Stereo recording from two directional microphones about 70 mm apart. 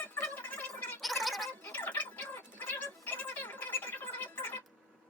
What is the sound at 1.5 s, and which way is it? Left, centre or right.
Gargling, left.